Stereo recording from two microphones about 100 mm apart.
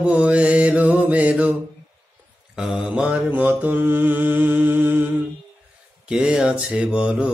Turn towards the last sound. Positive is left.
turn(degrees=-10)  # may be behind; listen again after turning